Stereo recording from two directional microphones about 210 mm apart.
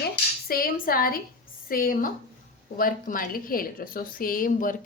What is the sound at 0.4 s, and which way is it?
A woman's voice, 45° left (ahead or behind).